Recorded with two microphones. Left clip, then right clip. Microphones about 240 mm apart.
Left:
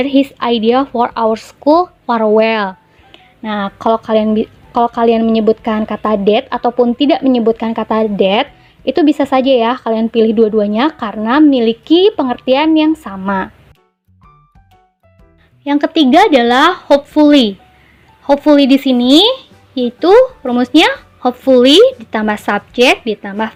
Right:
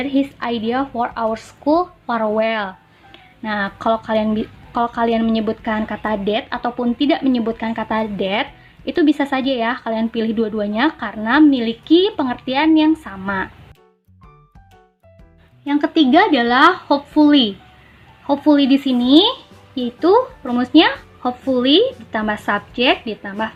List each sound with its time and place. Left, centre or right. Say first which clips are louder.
0.0 s speech: left 7 dB; left
3.1 s speech: left 3 dB; centre
15.6 s speech: left 4 dB; left